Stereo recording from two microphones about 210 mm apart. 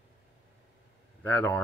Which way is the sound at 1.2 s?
10° left (ahead or behind).